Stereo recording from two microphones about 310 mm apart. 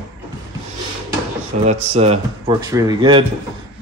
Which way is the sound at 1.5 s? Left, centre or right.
Right.